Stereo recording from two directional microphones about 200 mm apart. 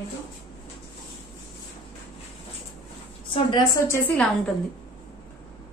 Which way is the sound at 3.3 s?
20° left (ahead or behind).